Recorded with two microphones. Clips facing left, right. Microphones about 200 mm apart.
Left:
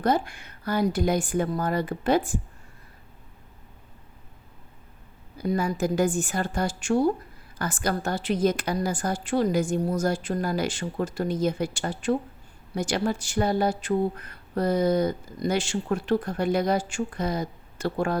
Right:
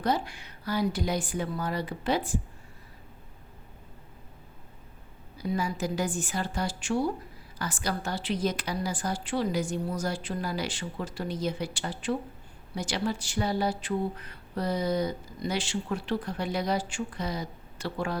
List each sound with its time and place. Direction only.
0.0 s speech: 50° left (ahead or behind)
5.4 s speech: 50° left (ahead or behind)